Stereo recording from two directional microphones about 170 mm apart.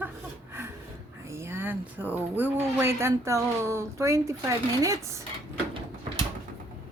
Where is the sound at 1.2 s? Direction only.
15° right (ahead or behind).